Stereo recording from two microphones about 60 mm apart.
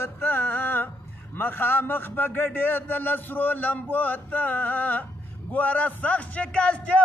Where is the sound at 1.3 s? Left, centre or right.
Left.